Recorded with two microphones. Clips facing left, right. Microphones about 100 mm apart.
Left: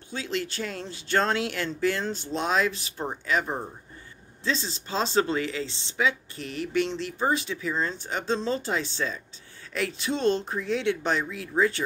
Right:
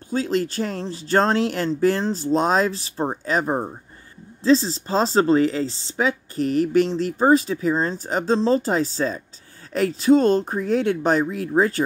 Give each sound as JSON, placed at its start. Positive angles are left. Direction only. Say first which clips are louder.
{"t": 0.1, "sound": "speech", "louder": "right 9 dB", "side_deg": -40}